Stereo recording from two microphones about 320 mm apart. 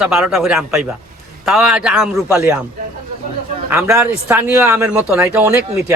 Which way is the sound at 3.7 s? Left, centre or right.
Centre.